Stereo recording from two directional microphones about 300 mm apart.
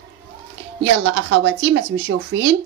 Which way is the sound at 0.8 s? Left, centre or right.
Right.